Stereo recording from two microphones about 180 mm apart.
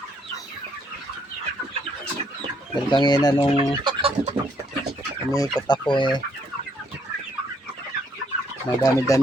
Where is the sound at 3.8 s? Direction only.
30° right (ahead or behind).